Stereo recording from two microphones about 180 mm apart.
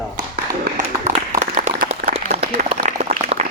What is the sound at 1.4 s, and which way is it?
Applause, 50° right (ahead or behind).